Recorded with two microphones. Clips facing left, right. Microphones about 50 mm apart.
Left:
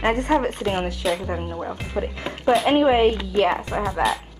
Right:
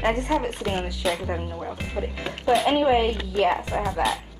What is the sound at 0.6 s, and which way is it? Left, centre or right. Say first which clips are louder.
Speech: left 3 dB; left.